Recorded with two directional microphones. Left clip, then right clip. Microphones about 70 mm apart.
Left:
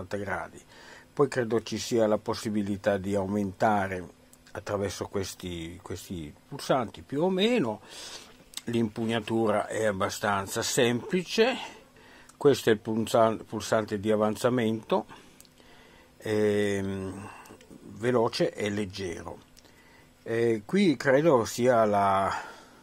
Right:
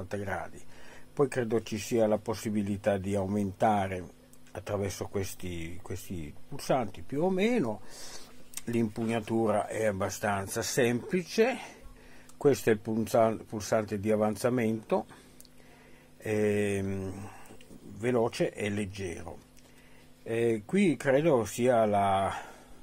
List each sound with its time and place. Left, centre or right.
0.1 s speech: centre
7.2 s speech: left
12.9 s speech: centre
16.2 s speech: centre
20.4 s speech: centre